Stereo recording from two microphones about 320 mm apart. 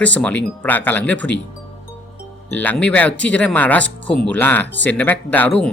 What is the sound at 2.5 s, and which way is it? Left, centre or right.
Speech, centre.